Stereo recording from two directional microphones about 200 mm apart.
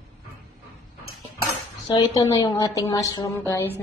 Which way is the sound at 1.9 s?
20° left (ahead or behind).